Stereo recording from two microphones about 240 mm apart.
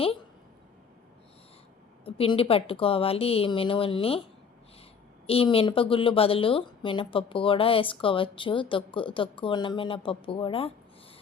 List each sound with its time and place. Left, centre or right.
2.0 s a woman's voice: left
5.2 s a woman's voice: left